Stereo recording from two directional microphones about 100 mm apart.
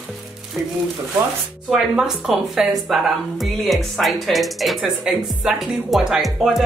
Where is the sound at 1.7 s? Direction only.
5° right (ahead or behind).